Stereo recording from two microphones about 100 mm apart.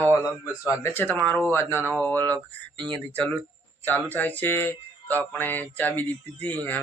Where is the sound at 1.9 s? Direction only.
15° left (ahead or behind).